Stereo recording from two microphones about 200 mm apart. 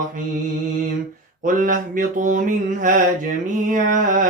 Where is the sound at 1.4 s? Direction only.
40° right (ahead or behind).